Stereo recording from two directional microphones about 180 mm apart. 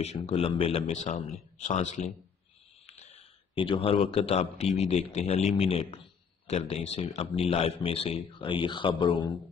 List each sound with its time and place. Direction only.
0.0 s a man's voice: 35° left (ahead or behind)